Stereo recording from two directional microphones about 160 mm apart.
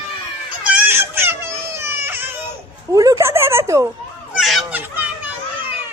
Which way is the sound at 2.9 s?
20° right (ahead or behind).